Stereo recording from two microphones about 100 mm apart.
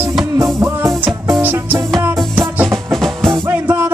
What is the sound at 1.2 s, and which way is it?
Music, 25° right (ahead or behind).